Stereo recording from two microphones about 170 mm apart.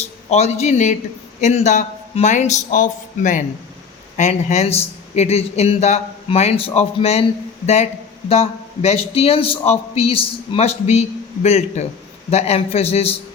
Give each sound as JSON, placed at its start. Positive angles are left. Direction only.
{"t": 0.0, "sound": "a man's voice", "side_deg": 40}
{"t": 8.3, "sound": "a man's voice", "side_deg": 35}